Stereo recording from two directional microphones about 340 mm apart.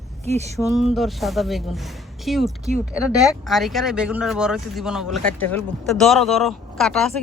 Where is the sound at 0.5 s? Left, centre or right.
Centre.